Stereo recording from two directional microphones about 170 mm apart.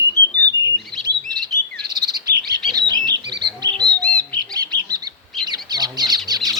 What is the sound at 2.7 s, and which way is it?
Bird, 25° right (ahead or behind).